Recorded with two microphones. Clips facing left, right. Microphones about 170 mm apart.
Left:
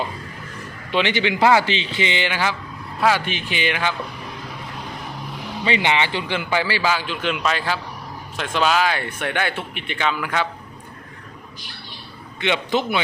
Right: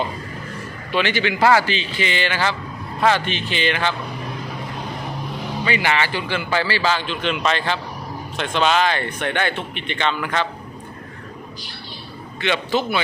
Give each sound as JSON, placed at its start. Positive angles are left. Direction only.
{"t": 0.9, "sound": "a man's voice", "side_deg": 20}
{"t": 5.6, "sound": "speech", "side_deg": 25}
{"t": 12.4, "sound": "a man's voice", "side_deg": 20}